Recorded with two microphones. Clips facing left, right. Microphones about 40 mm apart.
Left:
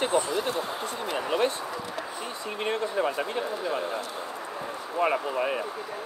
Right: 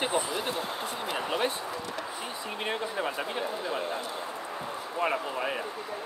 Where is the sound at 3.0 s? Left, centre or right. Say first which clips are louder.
Left 5 dB; centre.